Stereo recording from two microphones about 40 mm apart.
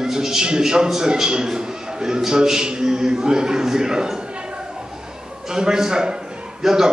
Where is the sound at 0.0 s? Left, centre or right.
Centre.